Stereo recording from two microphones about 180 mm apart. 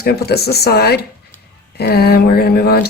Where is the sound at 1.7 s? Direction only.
60° left (ahead or behind).